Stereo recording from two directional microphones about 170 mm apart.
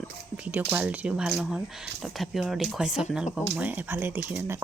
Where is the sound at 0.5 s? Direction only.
10° right (ahead or behind).